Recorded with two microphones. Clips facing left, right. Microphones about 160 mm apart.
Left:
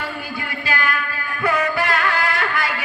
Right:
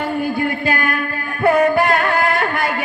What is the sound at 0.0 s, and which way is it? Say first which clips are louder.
Music: right 10 dB; 50° right (ahead or behind).